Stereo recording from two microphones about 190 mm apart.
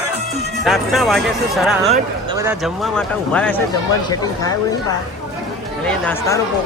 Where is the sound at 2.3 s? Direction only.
15° right (ahead or behind).